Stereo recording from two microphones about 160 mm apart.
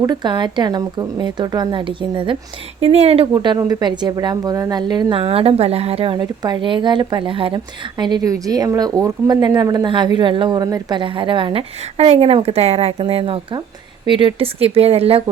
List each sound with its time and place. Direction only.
0.0 s a woman's voice: 25° right (ahead or behind)
3.3 s a woman's voice: 25° right (ahead or behind)